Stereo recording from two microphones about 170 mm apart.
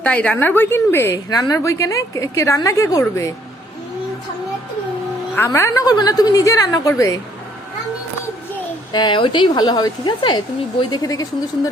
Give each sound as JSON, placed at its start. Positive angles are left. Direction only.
{"t": 0.0, "sound": "a woman's voice", "side_deg": 5}
{"t": 5.5, "sound": "speech", "side_deg": 20}
{"t": 8.9, "sound": "speech", "side_deg": 25}